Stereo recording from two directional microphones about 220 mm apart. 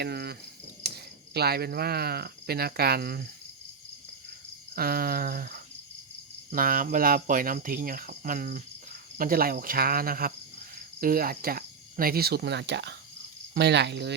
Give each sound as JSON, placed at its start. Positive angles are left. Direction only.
{"t": 0.0, "sound": "speech", "side_deg": -45}
{"t": 4.7, "sound": "speech", "side_deg": -45}